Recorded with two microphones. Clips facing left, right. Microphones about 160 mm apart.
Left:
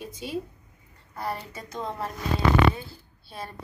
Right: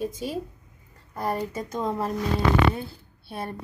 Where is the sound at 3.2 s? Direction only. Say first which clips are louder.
Right 5 dB; 55° right (ahead or behind).